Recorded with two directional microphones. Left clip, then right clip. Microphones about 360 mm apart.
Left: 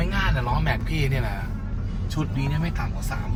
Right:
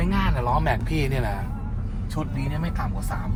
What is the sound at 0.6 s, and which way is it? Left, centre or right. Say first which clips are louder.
Speech: right 2 dB; right.